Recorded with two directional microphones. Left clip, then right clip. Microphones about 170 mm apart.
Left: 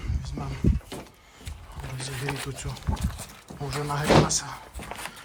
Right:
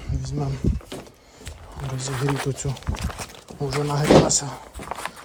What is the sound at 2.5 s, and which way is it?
Speech, 35° right (ahead or behind).